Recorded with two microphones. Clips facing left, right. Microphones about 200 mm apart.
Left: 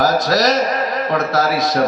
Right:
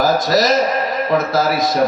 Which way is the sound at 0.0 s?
Centre (ahead or behind).